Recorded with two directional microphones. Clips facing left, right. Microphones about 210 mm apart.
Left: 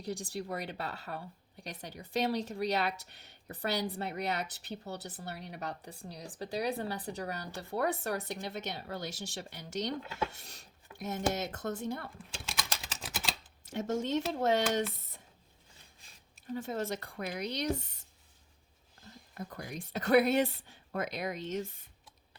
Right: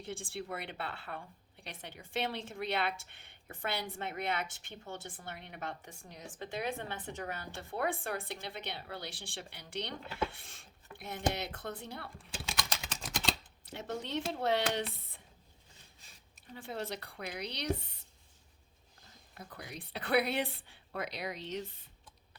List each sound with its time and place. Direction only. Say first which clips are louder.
0.0 s speech: left 4 dB; 40° left (ahead or behind)
12.3 s typing: right 2 dB; centre (ahead or behind)
13.7 s speech: left 7 dB; 45° left (ahead or behind)
16.5 s speech: left 5 dB; 45° left (ahead or behind)
19.3 s speech: left 5 dB; 45° left (ahead or behind)